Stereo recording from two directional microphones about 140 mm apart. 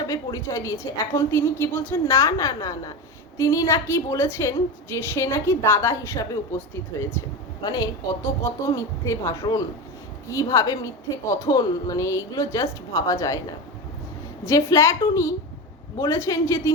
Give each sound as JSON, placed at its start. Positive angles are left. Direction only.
{"t": 0.1, "sound": "a woman's voice", "side_deg": 25}
{"t": 14.4, "sound": "a woman's voice", "side_deg": 25}